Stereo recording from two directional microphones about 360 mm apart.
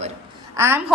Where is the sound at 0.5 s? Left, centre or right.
Centre.